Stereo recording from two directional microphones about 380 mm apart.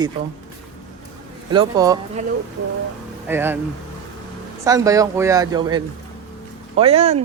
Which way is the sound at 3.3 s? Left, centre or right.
Centre.